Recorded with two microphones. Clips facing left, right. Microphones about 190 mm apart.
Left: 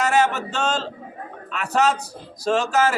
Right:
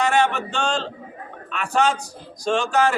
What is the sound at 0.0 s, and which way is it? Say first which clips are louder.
A man's voice: even; 5° left (ahead or behind).